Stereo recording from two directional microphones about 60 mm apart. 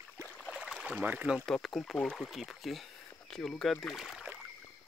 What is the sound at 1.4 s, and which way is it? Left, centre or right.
Speech, centre.